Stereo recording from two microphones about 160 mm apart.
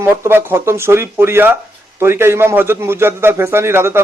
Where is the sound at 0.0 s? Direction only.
15° right (ahead or behind).